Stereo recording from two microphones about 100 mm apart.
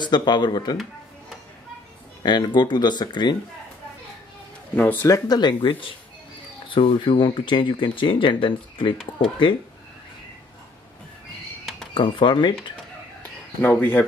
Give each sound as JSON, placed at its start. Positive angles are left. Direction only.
{"t": 0.0, "sound": "speech", "side_deg": 45}
{"t": 2.2, "sound": "speech", "side_deg": 50}
{"t": 4.7, "sound": "speech", "side_deg": 20}
{"t": 5.0, "sound": "speech", "side_deg": 40}
{"t": 11.9, "sound": "speech", "side_deg": 55}
{"t": 13.6, "sound": "speech", "side_deg": 15}